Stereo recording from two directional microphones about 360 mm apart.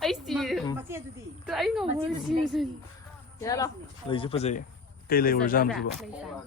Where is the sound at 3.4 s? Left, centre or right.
Centre.